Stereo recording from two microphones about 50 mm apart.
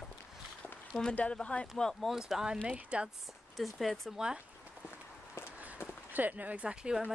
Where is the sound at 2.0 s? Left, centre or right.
Centre.